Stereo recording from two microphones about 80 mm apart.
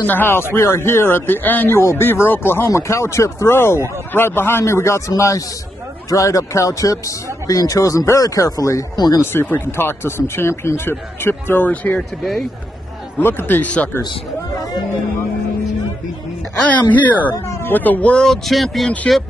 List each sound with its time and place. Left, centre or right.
0.0 s a man's voice: left
8.9 s speech: left
9.2 s speech: left
12.2 s speech: centre
13.2 s speech: left
16.9 s speech: left; by 18.9 s centre